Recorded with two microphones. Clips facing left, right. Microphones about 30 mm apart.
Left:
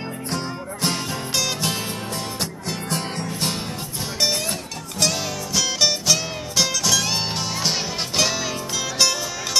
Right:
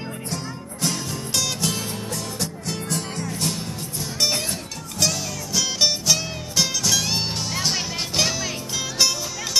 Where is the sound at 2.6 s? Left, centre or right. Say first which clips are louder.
Left 3 dB; left.